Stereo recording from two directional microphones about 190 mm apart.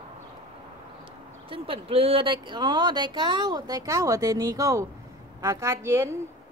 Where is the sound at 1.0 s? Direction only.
30° right (ahead or behind).